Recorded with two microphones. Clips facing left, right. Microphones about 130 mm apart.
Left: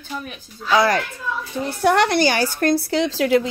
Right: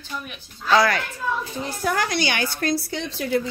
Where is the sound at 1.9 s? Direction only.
70° left (ahead or behind).